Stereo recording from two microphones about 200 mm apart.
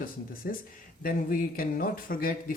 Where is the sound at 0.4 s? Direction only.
50° left (ahead or behind).